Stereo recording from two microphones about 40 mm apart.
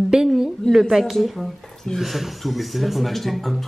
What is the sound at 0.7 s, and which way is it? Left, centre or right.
Speech, centre.